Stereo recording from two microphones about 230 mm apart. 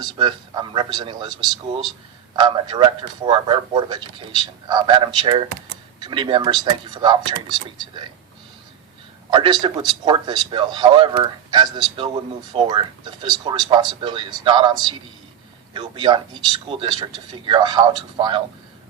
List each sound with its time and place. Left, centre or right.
0.0 s a man's voice: centre
2.3 s a man's voice: centre
9.3 s a man's voice: centre